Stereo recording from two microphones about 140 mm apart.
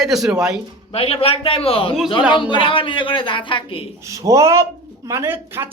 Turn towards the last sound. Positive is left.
turn(degrees=-15)  # may be behind; listen again after turning